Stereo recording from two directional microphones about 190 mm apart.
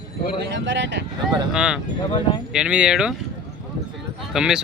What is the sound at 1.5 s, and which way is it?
Speech, 5° right (ahead or behind).